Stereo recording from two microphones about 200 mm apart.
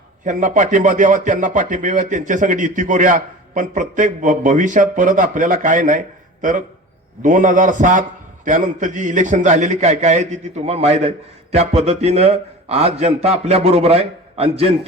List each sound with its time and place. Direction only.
0.3 s speech: 40° right (ahead or behind)